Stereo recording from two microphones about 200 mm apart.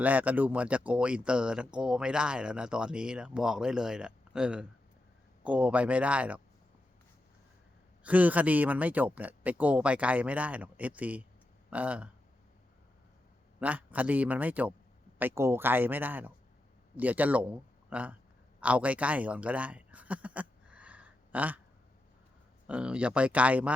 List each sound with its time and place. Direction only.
0.0 s speech: 10° right (ahead or behind)
8.0 s speech: 10° right (ahead or behind)
13.6 s a man's voice: 10° right (ahead or behind)
18.6 s a sound: 5° right (ahead or behind)
22.6 s speech: 5° right (ahead or behind)